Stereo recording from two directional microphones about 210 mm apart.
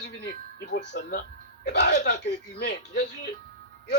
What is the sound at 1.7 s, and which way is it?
Speech, 55° left (ahead or behind).